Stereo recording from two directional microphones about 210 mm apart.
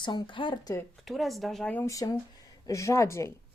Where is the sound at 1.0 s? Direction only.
Centre (ahead or behind).